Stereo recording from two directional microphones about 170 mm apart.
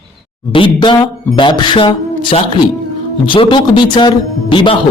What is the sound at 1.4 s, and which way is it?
Speech, 25° left (ahead or behind).